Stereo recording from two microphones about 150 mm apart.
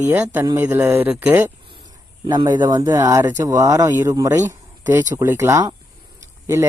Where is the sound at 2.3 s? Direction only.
25° right (ahead or behind).